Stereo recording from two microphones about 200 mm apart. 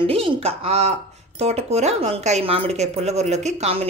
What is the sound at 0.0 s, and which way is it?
Speech, 30° right (ahead or behind).